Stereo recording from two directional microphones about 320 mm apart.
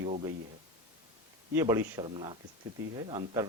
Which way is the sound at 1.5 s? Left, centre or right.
Centre.